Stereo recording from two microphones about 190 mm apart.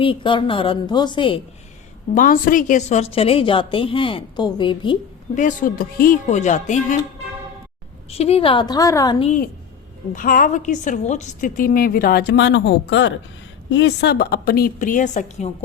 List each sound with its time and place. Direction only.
0.0 s a woman's voice: 25° left (ahead or behind)
2.1 s a woman's voice: 45° left (ahead or behind); by 4.9 s 25° left (ahead or behind)
5.3 s speech: 40° left (ahead or behind)
8.1 s a woman's voice: 30° left (ahead or behind); by 9.1 s 15° left (ahead or behind)
10.1 s a woman's voice: 45° left (ahead or behind)